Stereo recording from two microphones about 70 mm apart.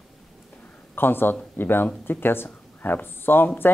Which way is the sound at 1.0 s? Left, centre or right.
Left.